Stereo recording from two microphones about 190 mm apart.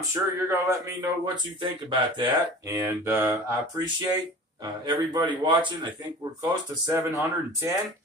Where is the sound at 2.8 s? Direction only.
10° right (ahead or behind).